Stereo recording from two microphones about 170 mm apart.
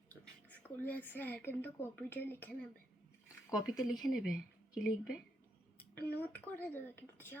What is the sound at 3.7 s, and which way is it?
Speech, centre (ahead or behind).